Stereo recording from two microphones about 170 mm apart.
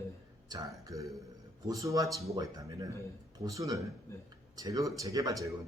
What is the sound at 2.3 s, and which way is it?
A man's voice, 20° right (ahead or behind).